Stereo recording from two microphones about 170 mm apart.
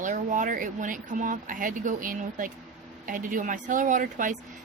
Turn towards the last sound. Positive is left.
turn(degrees=-50)  # may be behind; listen again after turning